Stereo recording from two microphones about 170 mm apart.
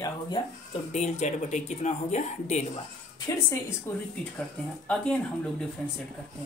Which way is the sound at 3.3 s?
15° left (ahead or behind).